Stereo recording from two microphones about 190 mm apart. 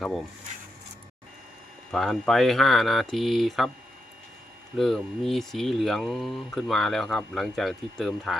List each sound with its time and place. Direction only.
0.0 s speech: centre (ahead or behind)
1.9 s speech: centre (ahead or behind)
4.8 s speech: centre (ahead or behind)